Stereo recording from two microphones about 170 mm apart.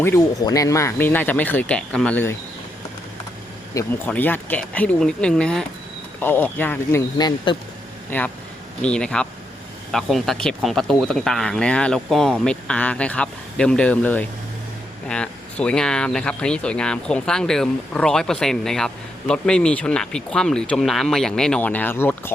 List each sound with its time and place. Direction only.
0.0 s speech: 20° left (ahead or behind)
3.8 s speech: 10° left (ahead or behind)
7.2 s speech: 25° left (ahead or behind)
8.1 s speech: 10° left (ahead or behind)